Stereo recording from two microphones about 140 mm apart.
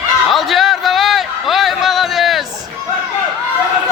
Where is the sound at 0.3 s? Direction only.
Centre (ahead or behind).